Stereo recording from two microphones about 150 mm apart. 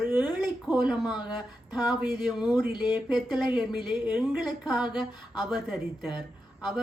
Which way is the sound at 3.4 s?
Centre (ahead or behind).